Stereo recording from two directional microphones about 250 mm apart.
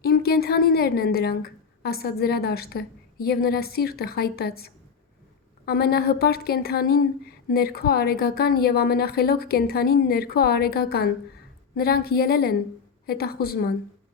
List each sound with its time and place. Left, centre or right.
0.0 s a woman's voice: left